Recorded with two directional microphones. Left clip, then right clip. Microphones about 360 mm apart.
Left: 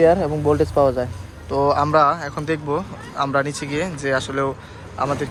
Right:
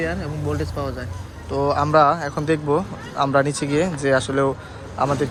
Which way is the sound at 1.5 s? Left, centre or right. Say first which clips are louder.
Left 1 dB; centre.